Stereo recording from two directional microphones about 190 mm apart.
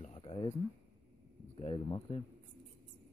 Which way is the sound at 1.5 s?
25° left (ahead or behind).